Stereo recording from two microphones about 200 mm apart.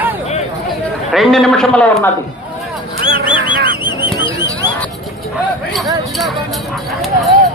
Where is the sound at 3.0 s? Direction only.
25° left (ahead or behind).